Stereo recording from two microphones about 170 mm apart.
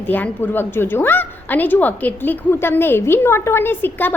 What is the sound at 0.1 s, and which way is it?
A woman's voice, 10° left (ahead or behind).